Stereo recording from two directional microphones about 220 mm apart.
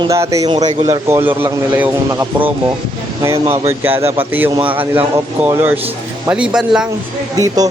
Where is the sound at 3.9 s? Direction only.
25° right (ahead or behind).